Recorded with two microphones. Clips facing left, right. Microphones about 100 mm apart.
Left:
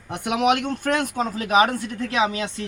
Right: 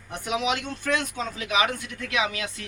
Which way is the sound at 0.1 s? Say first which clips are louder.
Left 6 dB; 60° left (ahead or behind).